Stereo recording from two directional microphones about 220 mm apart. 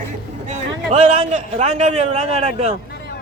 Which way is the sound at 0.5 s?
30° right (ahead or behind).